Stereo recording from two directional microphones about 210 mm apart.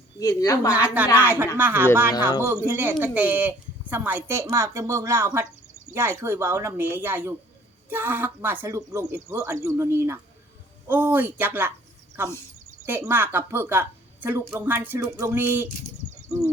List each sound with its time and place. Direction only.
0.2 s speech: 15° left (ahead or behind)
0.7 s speech: 5° right (ahead or behind)